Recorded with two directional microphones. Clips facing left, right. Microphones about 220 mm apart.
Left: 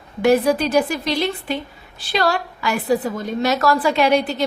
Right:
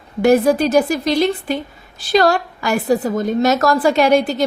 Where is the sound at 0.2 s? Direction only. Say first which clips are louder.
Right 3 dB; 45° right (ahead or behind).